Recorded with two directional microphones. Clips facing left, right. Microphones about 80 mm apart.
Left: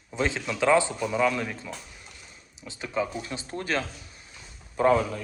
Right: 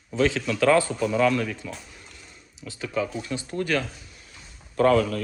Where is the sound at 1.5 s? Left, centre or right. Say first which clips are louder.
Right 2 dB; left.